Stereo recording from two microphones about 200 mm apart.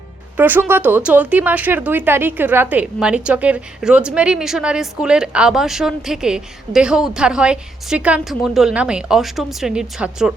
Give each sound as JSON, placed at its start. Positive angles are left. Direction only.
{"t": 0.3, "sound": "speech", "side_deg": -10}